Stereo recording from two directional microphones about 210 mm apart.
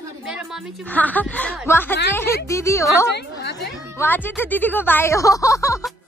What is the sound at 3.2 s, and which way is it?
Speech, 50° left (ahead or behind).